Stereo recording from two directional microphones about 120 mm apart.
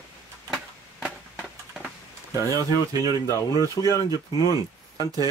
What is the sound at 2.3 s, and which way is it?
Speech, 30° right (ahead or behind).